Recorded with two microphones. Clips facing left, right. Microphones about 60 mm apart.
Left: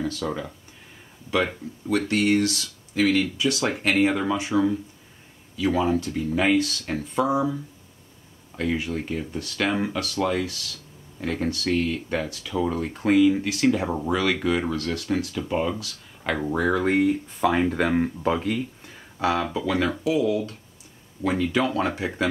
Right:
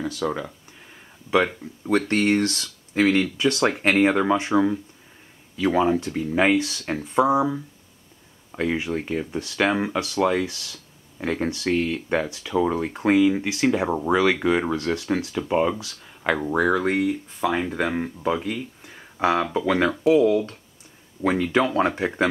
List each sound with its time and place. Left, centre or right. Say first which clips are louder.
0.0 s speech: right 2 dB; centre
1.9 s speech: right 1 dB; right
4.4 s speech: right 2 dB; right; by 15.7 s centre
16.4 s speech: even; centre
19.1 s speech: right 3 dB; right